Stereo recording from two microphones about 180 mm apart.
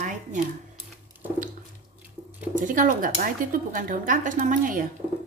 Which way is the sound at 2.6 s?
45° right (ahead or behind).